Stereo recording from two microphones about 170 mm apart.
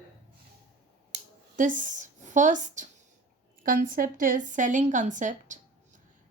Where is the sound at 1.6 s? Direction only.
50° right (ahead or behind).